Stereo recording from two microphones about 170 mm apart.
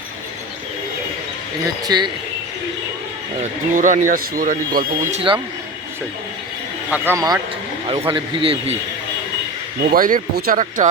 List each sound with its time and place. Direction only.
1.6 s speech: 25° right (ahead or behind)
3.4 s speech: 50° right (ahead or behind)
5.1 s speech: 30° right (ahead or behind)
6.9 s a man's voice: 10° right (ahead or behind)
7.9 s speech: 30° right (ahead or behind)
9.9 s speech: 55° right (ahead or behind)